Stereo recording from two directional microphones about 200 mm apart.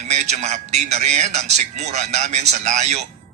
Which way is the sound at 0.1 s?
35° right (ahead or behind).